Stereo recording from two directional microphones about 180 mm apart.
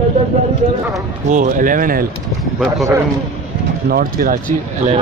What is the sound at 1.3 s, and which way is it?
Speech, 45° right (ahead or behind).